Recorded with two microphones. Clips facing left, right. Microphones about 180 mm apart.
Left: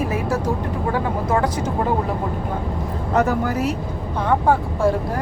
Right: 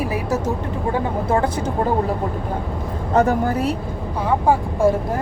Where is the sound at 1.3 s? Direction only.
30° right (ahead or behind).